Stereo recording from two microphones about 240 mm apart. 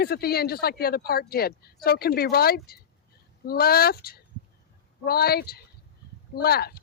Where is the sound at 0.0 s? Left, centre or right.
Left.